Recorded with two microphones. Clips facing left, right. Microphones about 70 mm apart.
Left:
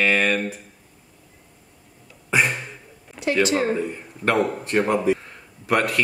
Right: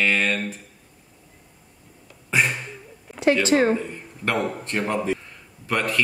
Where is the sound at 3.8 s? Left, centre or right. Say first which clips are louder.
Left 4 dB; centre.